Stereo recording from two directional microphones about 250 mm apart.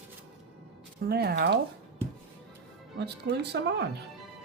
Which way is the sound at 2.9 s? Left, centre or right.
Right.